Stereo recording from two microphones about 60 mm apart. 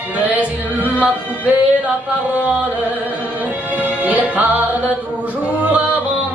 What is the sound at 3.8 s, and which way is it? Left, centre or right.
Music, right.